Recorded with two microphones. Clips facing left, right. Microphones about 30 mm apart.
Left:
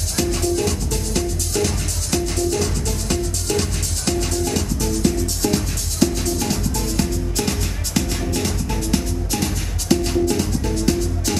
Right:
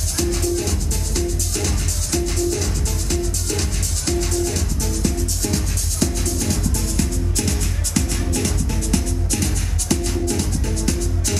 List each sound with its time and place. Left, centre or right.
0.1 s music: centre
10.3 s music: centre